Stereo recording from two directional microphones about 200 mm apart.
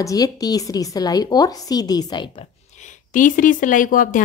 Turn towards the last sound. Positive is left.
turn(degrees=40)  # may be behind; listen again after turning